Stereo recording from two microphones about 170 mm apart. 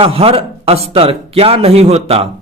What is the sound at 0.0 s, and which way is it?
Speech, 35° right (ahead or behind).